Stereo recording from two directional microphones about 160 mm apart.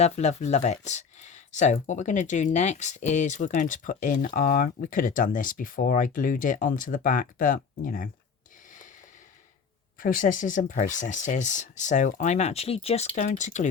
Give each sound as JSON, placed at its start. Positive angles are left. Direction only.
{"t": 0.0, "sound": "speech", "side_deg": 40}
{"t": 10.0, "sound": "speech", "side_deg": 60}